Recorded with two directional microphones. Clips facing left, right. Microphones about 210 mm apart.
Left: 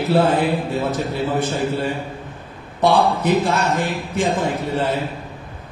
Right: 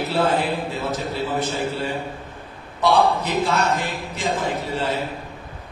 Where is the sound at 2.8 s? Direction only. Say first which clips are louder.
Left 2 dB; 55° left (ahead or behind).